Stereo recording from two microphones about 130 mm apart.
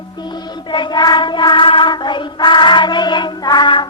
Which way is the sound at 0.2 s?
35° left (ahead or behind).